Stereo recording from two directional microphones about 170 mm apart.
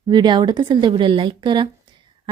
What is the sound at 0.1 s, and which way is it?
A woman's voice, 25° right (ahead or behind).